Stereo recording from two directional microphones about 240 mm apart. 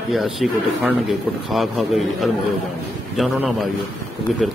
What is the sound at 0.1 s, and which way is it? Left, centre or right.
Speech, centre.